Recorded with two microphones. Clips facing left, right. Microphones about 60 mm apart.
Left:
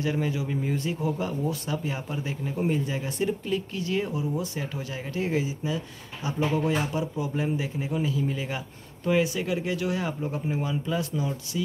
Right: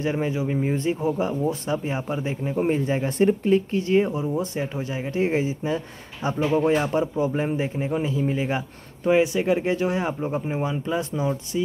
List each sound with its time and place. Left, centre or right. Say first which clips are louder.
0.0 s speech: right 3 dB; right